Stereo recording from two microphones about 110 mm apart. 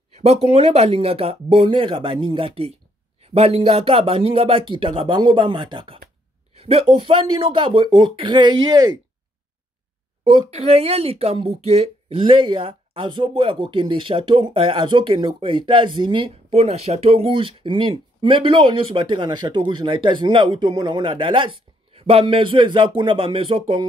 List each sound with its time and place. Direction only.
0.1 s speech: 70° right (ahead or behind)
3.2 s speech: 65° right (ahead or behind); by 5.9 s 50° right (ahead or behind)
6.5 s speech: 65° right (ahead or behind); by 9.0 s 40° right (ahead or behind)
10.5 s speech: 70° right (ahead or behind); by 23.9 s 50° right (ahead or behind)